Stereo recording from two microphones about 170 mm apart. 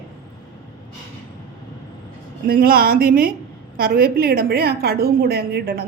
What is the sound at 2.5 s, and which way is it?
A woman's voice, 60° right (ahead or behind).